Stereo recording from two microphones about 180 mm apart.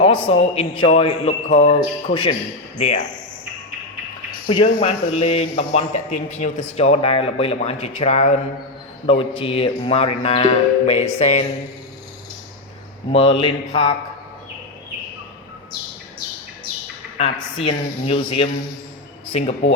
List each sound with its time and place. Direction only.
0.0 s a man's voice: 30° left (ahead or behind)
4.4 s a man's voice: 30° left (ahead or behind)
13.1 s a man's voice: 30° left (ahead or behind)
17.6 s a man's voice: 30° left (ahead or behind)